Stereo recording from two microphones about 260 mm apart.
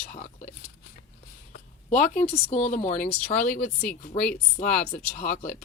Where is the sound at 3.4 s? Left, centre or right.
Left.